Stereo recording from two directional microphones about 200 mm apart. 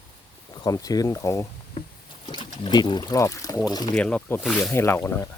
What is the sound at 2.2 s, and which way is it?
Speech, 30° left (ahead or behind).